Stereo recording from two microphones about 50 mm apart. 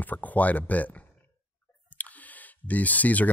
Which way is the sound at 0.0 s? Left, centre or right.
Left.